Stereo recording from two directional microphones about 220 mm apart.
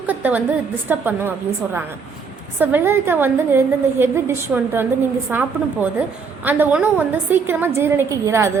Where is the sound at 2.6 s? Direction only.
10° right (ahead or behind).